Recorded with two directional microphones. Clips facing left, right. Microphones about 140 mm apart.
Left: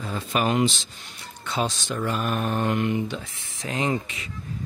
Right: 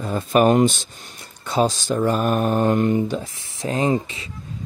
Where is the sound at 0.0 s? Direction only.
45° right (ahead or behind); by 4.3 s 30° right (ahead or behind).